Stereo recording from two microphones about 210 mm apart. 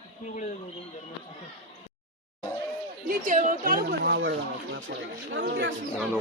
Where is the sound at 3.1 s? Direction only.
40° right (ahead or behind); by 5.7 s 55° right (ahead or behind).